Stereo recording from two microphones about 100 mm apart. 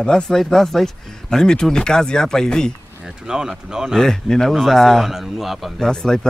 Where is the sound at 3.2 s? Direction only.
5° right (ahead or behind).